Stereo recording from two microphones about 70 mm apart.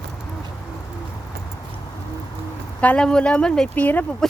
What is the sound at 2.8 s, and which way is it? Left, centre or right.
Speech, left.